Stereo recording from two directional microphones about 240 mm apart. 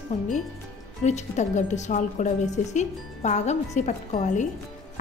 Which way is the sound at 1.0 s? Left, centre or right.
Left.